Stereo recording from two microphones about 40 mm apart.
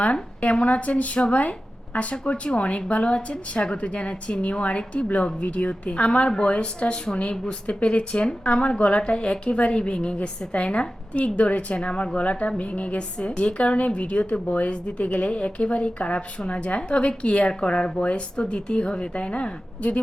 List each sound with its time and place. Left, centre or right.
0.0 s a woman's voice: left